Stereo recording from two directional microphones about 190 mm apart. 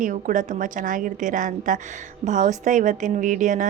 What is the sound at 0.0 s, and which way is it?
A woman's voice, 45° right (ahead or behind).